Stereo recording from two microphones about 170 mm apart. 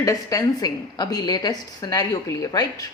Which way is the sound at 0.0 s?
20° left (ahead or behind).